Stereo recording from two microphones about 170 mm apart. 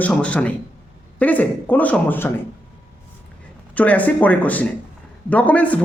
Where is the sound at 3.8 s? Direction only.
10° left (ahead or behind).